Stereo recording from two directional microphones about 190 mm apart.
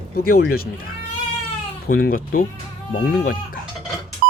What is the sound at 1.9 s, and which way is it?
Speech, 50° left (ahead or behind).